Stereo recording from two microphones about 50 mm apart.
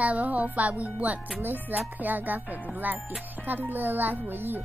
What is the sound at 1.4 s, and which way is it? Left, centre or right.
Speech, right.